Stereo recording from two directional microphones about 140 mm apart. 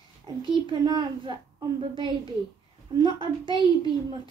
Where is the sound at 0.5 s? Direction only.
35° right (ahead or behind).